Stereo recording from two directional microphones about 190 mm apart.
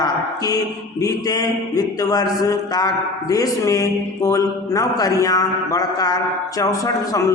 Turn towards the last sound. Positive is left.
turn(degrees=15)  # may be behind; listen again after turning